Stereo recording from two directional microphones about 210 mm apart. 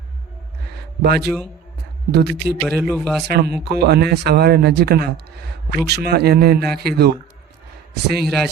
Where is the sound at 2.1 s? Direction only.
50° right (ahead or behind).